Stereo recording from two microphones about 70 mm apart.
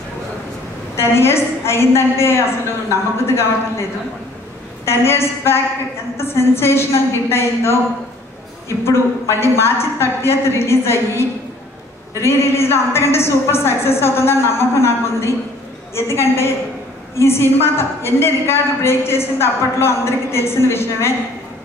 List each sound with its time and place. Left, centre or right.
0.9 s a woman's voice: left
4.8 s a woman's voice: left